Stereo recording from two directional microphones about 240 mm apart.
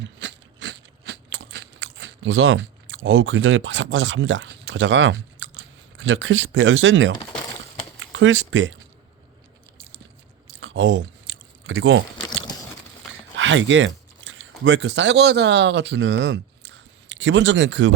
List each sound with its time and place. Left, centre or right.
0.0 s crunch: right
7.9 s speech: right
10.6 s chewing: right
13.3 s speech: right